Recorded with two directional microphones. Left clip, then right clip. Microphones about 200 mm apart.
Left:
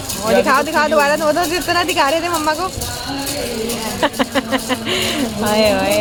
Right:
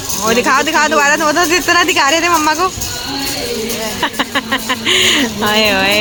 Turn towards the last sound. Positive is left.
turn(degrees=-5)  # may be behind; listen again after turning